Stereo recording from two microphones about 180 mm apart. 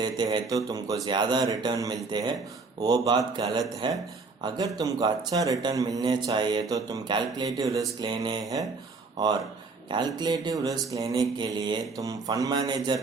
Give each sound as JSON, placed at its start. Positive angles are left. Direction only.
{"t": 0.0, "sound": "speech", "side_deg": -25}
{"t": 9.9, "sound": "speech", "side_deg": -25}